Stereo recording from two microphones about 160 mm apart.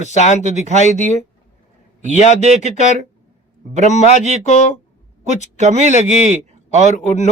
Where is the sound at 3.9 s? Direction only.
45° left (ahead or behind).